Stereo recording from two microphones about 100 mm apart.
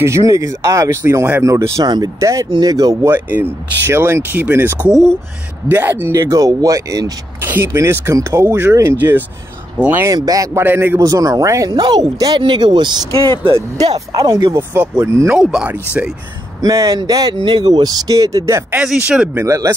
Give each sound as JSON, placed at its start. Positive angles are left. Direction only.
{"t": 0.0, "sound": "speech", "side_deg": -30}
{"t": 3.0, "sound": "speech", "side_deg": -20}
{"t": 7.4, "sound": "speech", "side_deg": -20}
{"t": 10.0, "sound": "speech", "side_deg": -35}
{"t": 10.6, "sound": "speech", "side_deg": -20}
{"t": 11.0, "sound": "speech", "side_deg": -35}
{"t": 13.1, "sound": "speech", "side_deg": -60}
{"t": 14.2, "sound": "speech", "side_deg": -35}
{"t": 15.3, "sound": "speech", "side_deg": 0}
{"t": 15.6, "sound": "speech", "side_deg": -15}
{"t": 16.6, "sound": "speech", "side_deg": -35}
{"t": 18.8, "sound": "speech", "side_deg": -5}
{"t": 19.3, "sound": "speech", "side_deg": -30}